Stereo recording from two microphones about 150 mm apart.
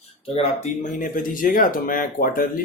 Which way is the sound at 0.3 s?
55° left (ahead or behind).